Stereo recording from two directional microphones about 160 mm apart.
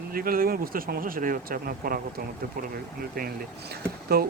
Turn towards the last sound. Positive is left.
turn(degrees=-80)